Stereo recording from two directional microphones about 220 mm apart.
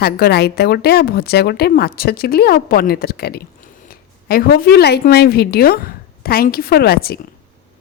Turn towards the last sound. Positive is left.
turn(degrees=45)  # may be behind; listen again after turning